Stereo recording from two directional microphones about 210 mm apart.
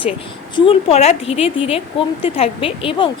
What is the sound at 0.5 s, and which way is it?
Speech, 25° left (ahead or behind).